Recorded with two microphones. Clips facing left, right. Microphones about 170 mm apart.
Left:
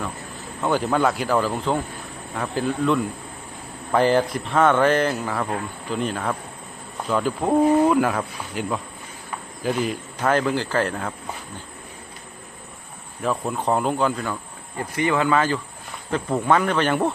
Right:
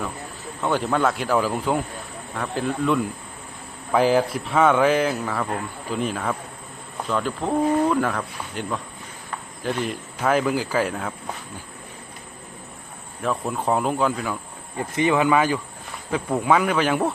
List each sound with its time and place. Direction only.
0.6 s speech: centre (ahead or behind)
13.2 s speech: centre (ahead or behind)
14.8 s speech: 20° right (ahead or behind)